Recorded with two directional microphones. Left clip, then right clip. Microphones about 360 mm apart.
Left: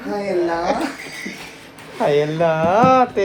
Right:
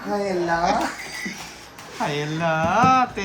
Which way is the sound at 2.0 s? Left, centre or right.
Centre.